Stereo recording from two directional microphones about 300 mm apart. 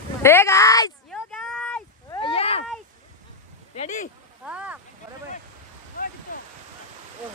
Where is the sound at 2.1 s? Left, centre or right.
Centre.